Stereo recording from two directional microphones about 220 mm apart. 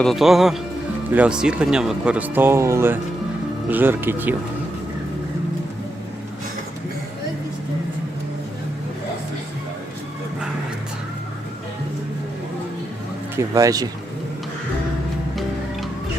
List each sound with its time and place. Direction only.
0.0 s speech: centre (ahead or behind)
13.3 s speech: 15° right (ahead or behind)